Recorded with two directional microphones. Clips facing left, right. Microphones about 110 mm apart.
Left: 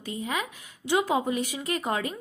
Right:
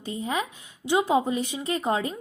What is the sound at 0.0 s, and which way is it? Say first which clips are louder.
A woman's voice: right 2 dB; 30° right (ahead or behind).